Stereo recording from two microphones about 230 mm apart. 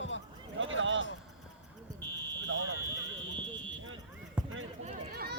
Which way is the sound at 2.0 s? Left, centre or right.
Centre.